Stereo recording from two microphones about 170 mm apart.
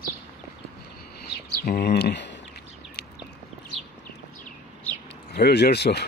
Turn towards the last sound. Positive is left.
turn(degrees=75)  # may be behind; listen again after turning